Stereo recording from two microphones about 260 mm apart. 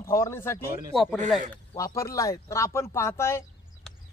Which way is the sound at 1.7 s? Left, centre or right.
Centre.